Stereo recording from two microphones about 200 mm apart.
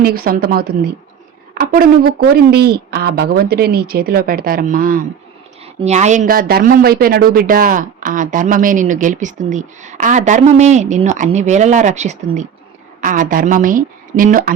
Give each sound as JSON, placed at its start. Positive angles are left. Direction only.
{"t": 0.0, "sound": "speech", "side_deg": -50}